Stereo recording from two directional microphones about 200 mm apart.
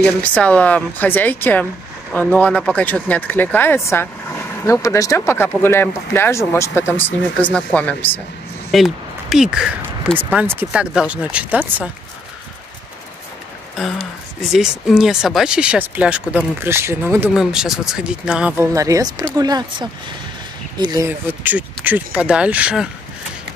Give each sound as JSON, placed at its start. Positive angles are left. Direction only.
{"t": 0.0, "sound": "speech", "side_deg": 5}
{"t": 13.7, "sound": "speech", "side_deg": 0}
{"t": 18.7, "sound": "speech", "side_deg": -15}